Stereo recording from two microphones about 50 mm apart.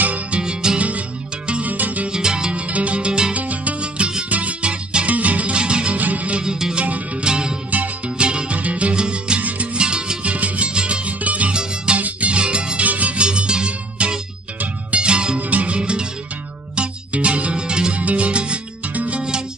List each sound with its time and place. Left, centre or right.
0.0 s music: right
0.4 s music: centre
0.7 s music: right
2.0 s music: centre
2.7 s music: right
3.3 s music: right
5.9 s music: right
6.4 s music: centre
7.7 s music: right
11.5 s music: centre
13.2 s music: centre